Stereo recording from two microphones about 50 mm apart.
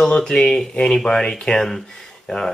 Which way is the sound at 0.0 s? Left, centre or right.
Centre.